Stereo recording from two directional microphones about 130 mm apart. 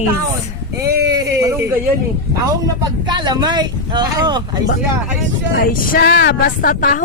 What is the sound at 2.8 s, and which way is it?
Speech, 35° right (ahead or behind).